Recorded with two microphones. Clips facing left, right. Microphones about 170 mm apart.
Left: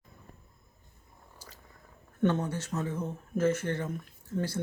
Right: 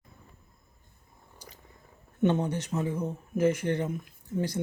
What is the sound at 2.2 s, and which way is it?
Speech, 20° right (ahead or behind).